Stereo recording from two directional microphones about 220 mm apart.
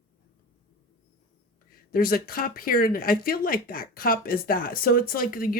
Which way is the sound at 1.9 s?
40° left (ahead or behind).